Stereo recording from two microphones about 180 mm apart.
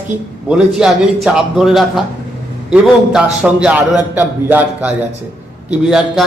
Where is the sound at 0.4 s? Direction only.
5° right (ahead or behind).